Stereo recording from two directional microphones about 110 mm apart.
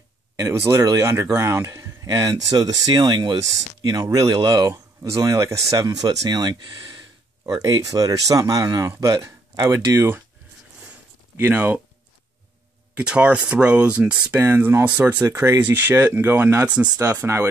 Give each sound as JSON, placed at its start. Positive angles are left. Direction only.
{"t": 0.4, "sound": "speech", "side_deg": -25}
{"t": 11.3, "sound": "speech", "side_deg": -20}
{"t": 13.0, "sound": "speech", "side_deg": -10}
{"t": 15.2, "sound": "speech", "side_deg": -25}
{"t": 17.2, "sound": "speech", "side_deg": -20}